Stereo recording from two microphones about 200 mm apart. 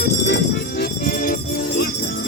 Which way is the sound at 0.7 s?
45° left (ahead or behind).